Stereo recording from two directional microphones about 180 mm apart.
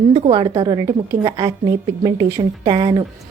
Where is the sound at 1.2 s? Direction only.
30° right (ahead or behind).